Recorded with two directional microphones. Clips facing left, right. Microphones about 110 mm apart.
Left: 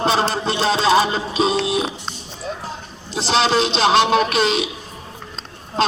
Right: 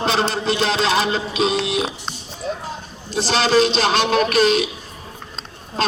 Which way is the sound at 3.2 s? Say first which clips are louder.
Right 1 dB; 20° left (ahead or behind).